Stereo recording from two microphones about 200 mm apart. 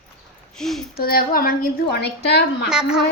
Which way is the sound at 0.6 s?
Centre (ahead or behind).